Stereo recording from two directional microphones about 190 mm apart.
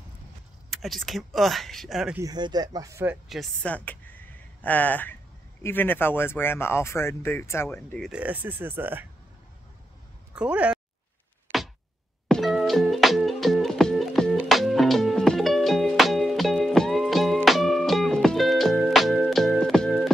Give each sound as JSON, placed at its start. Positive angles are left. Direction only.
{"t": 0.7, "sound": "speech", "side_deg": 0}
{"t": 2.1, "sound": "speech", "side_deg": -20}
{"t": 3.3, "sound": "speech", "side_deg": 5}
{"t": 8.1, "sound": "speech", "side_deg": -10}
{"t": 10.3, "sound": "speech", "side_deg": -5}
{"t": 12.3, "sound": "music", "side_deg": 0}